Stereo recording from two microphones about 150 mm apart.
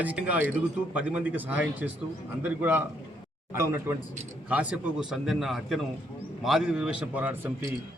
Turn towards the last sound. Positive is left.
turn(degrees=-10)  # may be behind; listen again after turning